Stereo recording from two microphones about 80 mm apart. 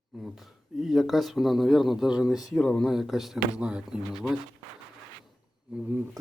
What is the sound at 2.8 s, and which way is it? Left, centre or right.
Speech, centre.